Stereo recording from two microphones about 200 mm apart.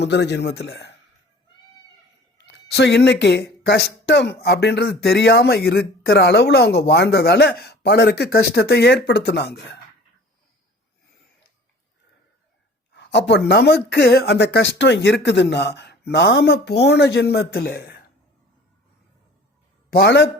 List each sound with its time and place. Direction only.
0.0 s speech: 60° left (ahead or behind)
2.5 s speech: 55° left (ahead or behind)
12.9 s speech: 60° left (ahead or behind)
19.9 s speech: 55° left (ahead or behind)